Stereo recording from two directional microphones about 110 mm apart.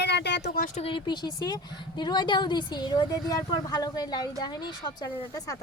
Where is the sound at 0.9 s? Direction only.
40° left (ahead or behind).